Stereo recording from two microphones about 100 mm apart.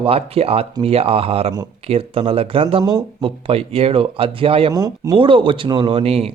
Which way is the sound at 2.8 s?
45° right (ahead or behind).